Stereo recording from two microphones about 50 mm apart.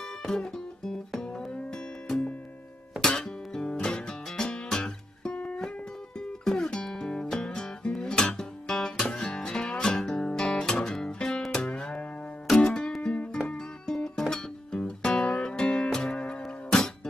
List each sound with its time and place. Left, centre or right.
0.2 s music: centre
3.0 s music: centre
6.4 s music: centre
13.0 s music: left
13.5 s music: centre